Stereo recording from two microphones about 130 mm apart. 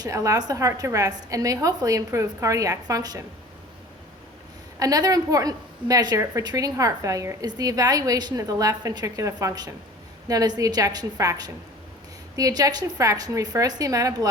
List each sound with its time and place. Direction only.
0.0 s a woman's voice: 25° right (ahead or behind)
4.8 s a woman's voice: 30° right (ahead or behind)